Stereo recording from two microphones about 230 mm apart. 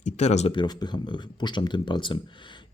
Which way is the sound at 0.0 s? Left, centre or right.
Left.